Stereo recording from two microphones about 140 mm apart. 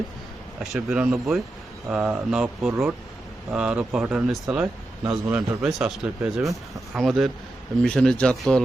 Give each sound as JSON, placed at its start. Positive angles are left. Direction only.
{"t": 0.6, "sound": "speech", "side_deg": -5}